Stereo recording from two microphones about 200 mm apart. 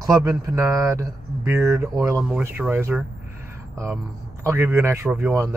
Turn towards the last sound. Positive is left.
turn(degrees=-15)  # may be behind; listen again after turning